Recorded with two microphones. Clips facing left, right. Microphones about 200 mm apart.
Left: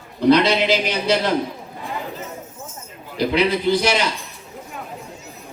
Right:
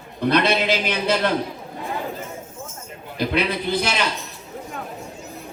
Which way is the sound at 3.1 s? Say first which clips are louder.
Left 4 dB; 55° right (ahead or behind).